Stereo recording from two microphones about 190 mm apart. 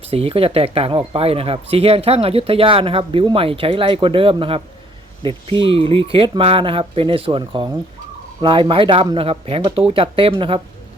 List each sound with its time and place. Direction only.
0.1 s speech: 30° right (ahead or behind)